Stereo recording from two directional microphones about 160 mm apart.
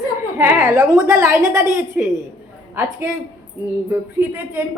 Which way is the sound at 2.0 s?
5° right (ahead or behind).